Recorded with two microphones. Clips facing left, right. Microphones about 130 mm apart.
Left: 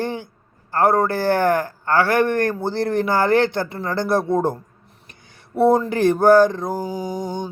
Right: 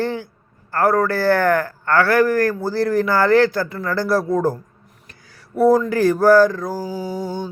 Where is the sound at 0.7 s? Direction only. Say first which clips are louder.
Even; 25° left (ahead or behind).